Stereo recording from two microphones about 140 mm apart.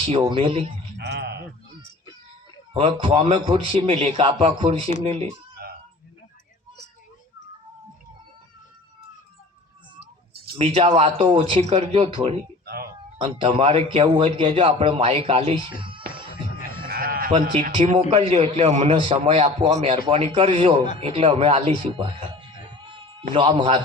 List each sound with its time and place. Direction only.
0.0 s a man's voice: 40° right (ahead or behind)
2.7 s a man's voice: 40° right (ahead or behind)
10.6 s a man's voice: 40° right (ahead or behind)
16.9 s sheep: 90° right
18.1 s a man's voice: 40° right (ahead or behind)
18.9 s a man's voice: 40° right (ahead or behind)